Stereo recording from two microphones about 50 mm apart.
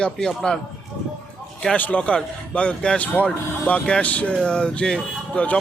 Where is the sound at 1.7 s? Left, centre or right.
Left.